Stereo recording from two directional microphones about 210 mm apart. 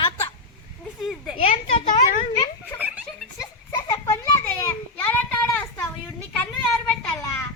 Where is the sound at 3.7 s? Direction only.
15° left (ahead or behind).